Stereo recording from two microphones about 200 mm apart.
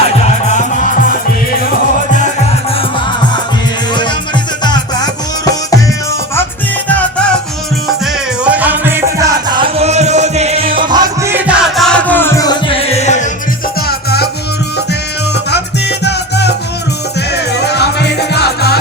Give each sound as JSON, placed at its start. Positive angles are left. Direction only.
{"t": 0.5, "sound": "music", "side_deg": 40}
{"t": 4.6, "sound": "music", "side_deg": 20}
{"t": 8.4, "sound": "music", "side_deg": -10}
{"t": 10.8, "sound": "music", "side_deg": -20}
{"t": 13.8, "sound": "music", "side_deg": 55}
{"t": 16.0, "sound": "music", "side_deg": 55}